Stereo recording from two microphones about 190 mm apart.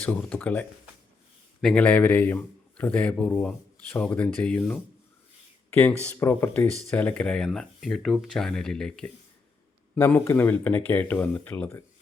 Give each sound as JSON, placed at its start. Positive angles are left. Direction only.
{"t": 0.0, "sound": "a man's voice", "side_deg": 5}
{"t": 1.6, "sound": "a man's voice", "side_deg": 5}
{"t": 6.1, "sound": "a man's voice", "side_deg": 15}